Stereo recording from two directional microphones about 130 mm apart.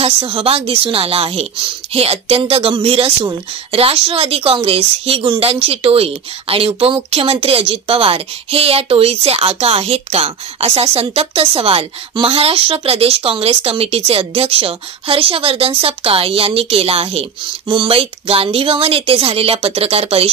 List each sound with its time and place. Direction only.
0.0 s a woman's voice: 45° right (ahead or behind)